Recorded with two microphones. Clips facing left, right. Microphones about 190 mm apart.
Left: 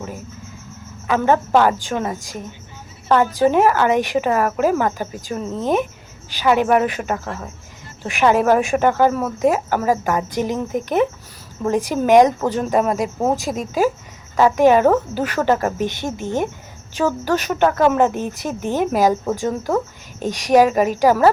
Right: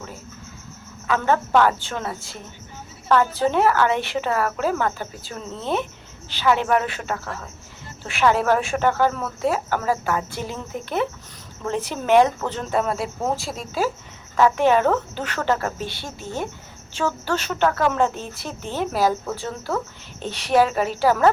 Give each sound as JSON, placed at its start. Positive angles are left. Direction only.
{"t": 1.0, "sound": "a woman's voice", "side_deg": 15}